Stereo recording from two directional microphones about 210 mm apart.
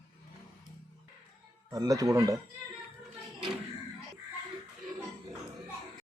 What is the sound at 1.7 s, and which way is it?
Speech, 15° right (ahead or behind).